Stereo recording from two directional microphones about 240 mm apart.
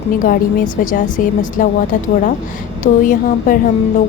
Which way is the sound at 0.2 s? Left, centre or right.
Left.